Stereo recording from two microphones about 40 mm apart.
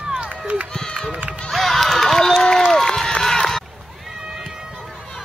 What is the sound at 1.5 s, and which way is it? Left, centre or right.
Run, centre.